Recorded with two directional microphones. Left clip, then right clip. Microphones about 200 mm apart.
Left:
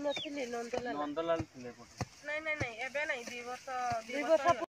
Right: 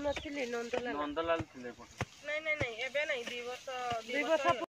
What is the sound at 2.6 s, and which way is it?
Speech, 55° right (ahead or behind).